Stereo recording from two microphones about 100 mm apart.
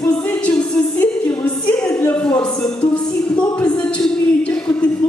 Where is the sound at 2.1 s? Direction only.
15° left (ahead or behind).